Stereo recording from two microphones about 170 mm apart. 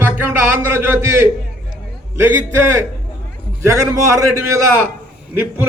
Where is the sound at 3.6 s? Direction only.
15° right (ahead or behind).